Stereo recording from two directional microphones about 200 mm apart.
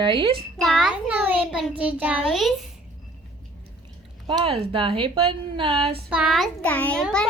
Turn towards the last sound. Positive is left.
turn(degrees=5)  # may be behind; listen again after turning